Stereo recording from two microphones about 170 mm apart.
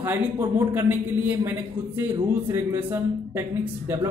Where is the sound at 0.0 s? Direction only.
15° right (ahead or behind).